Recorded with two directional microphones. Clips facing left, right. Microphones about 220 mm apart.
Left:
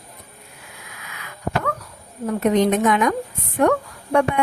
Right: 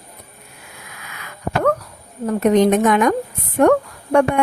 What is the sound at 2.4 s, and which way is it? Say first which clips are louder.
A woman's voice: right 3 dB; 45° right (ahead or behind).